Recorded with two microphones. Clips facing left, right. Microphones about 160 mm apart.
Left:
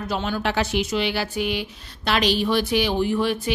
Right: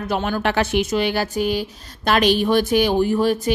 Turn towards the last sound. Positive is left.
turn(degrees=-40)  # may be behind; listen again after turning